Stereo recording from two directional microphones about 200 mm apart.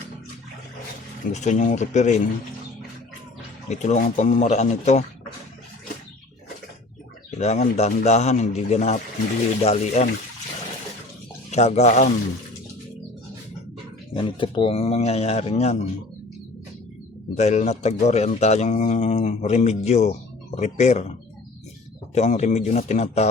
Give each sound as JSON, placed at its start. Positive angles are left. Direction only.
{"t": 1.3, "sound": "speech", "side_deg": 35}
{"t": 3.7, "sound": "speech", "side_deg": 35}
{"t": 7.3, "sound": "speech", "side_deg": 35}
{"t": 11.5, "sound": "speech", "side_deg": 35}
{"t": 14.1, "sound": "speech", "side_deg": 25}
{"t": 17.3, "sound": "speech", "side_deg": 35}